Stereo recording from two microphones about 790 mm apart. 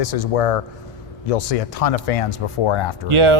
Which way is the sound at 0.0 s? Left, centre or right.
Left.